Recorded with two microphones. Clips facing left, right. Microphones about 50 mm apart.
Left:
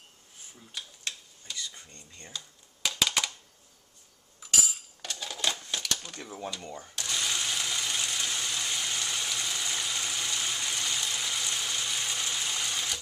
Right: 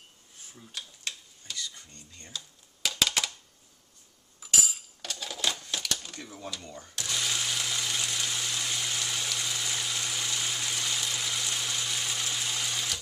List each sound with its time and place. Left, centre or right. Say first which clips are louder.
0.7 s tick-tock: even; centre
1.5 s speech: right 2 dB; centre
2.8 s typewriter: even; centre
4.4 s cutlery: even; centre
5.5 s typewriter: even; centre
6.2 s speech: left 3 dB; left
6.9 s a sound: even; centre